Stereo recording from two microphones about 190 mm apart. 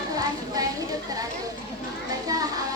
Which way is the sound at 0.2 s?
20° right (ahead or behind).